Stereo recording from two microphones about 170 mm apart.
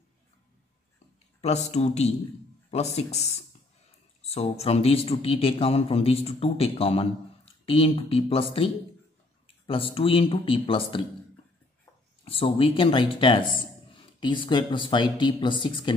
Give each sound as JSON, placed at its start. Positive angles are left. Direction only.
{"t": 1.4, "sound": "speech", "side_deg": 40}
{"t": 12.3, "sound": "speech", "side_deg": 35}